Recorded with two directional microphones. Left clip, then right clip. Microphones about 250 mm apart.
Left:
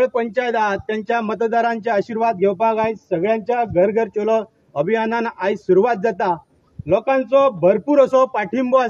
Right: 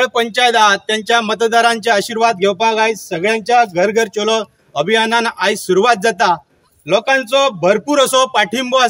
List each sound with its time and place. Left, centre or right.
0.0 s speech: centre
1.2 s speech: centre
1.5 s a man's voice: centre